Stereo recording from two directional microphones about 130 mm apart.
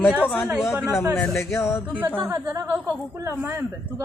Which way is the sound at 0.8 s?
20° left (ahead or behind).